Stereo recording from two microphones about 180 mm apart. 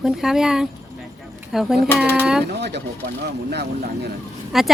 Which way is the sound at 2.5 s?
70° right (ahead or behind).